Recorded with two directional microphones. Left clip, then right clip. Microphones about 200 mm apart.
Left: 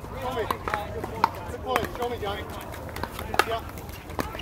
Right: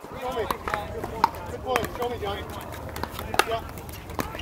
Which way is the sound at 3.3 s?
40° right (ahead or behind).